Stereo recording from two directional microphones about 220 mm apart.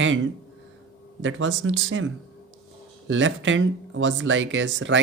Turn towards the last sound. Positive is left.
turn(degrees=-60)  # may be behind; listen again after turning